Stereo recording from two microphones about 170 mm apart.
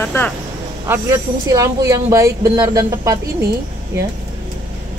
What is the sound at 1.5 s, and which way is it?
Speech, 20° right (ahead or behind).